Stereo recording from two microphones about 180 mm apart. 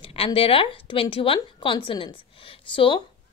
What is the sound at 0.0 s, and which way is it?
A woman's voice, 30° left (ahead or behind).